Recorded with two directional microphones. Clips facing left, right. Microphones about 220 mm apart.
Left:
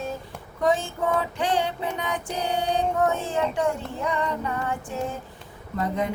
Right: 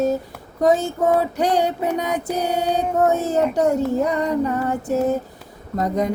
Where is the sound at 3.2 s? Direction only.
40° right (ahead or behind).